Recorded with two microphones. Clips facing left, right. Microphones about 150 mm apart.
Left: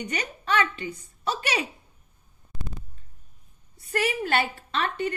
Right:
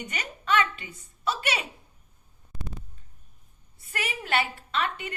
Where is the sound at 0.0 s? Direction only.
35° left (ahead or behind).